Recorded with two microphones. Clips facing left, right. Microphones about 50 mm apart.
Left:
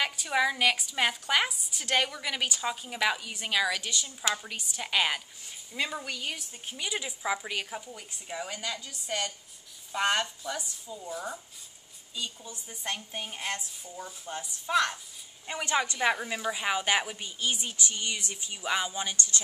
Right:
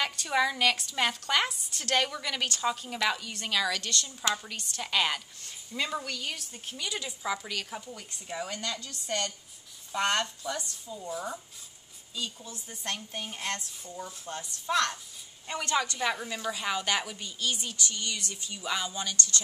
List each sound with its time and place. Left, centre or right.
0.0 s a woman's voice: centre
12.2 s a woman's voice: centre